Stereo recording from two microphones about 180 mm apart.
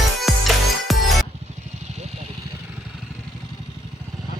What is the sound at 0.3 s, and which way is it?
Music, centre (ahead or behind).